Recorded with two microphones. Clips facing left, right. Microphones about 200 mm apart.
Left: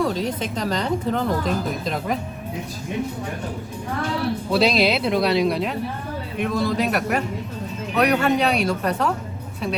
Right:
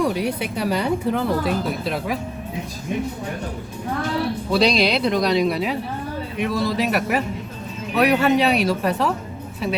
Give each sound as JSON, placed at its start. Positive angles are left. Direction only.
{"t": 0.0, "sound": "a woman's voice", "side_deg": -10}
{"t": 4.5, "sound": "speech", "side_deg": 5}